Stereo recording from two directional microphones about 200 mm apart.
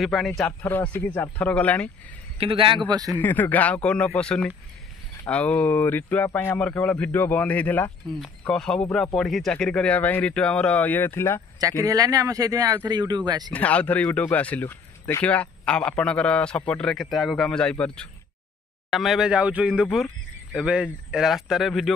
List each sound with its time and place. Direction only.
0.0 s speech: centre (ahead or behind)
2.3 s speech: 25° right (ahead or behind)
3.1 s speech: 10° left (ahead or behind)
11.8 s speech: 15° right (ahead or behind)
13.5 s speech: 5° left (ahead or behind)